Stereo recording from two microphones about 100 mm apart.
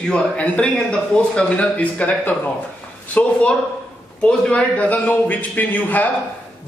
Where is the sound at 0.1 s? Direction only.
10° left (ahead or behind).